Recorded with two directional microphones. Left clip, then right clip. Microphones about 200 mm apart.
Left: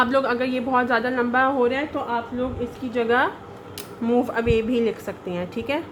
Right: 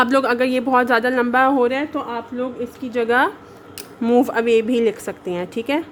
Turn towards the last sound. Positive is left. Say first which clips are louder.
# right 4 dB
turn(degrees=-40)  # may be behind; listen again after turning